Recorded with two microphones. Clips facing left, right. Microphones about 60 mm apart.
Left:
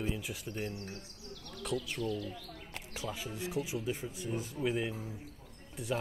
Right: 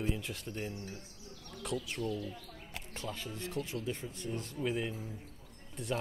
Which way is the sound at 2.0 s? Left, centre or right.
Left.